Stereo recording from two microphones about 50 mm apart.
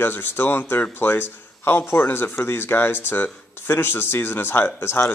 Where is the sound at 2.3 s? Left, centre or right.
Left.